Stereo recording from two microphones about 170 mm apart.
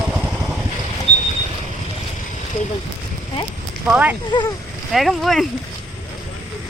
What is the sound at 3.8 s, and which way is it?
Speech, 10° right (ahead or behind).